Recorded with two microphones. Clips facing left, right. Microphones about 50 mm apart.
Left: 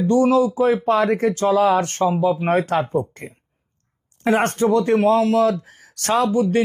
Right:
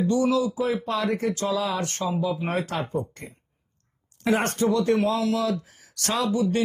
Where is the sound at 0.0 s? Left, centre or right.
Left.